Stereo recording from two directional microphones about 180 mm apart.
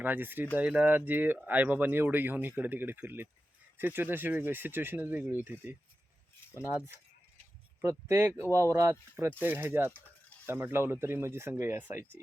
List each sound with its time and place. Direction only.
0.0 s speech: 10° right (ahead or behind)
6.7 s speech: 10° right (ahead or behind)